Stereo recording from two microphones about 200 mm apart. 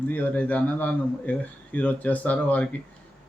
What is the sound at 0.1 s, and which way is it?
Speech, 10° left (ahead or behind).